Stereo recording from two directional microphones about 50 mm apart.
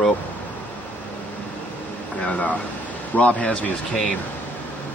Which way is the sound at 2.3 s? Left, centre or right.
Left.